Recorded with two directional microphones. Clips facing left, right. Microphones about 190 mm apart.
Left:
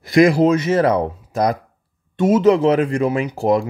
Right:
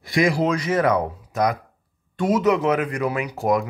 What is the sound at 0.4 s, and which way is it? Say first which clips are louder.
Speech: left 6 dB; 25° left (ahead or behind).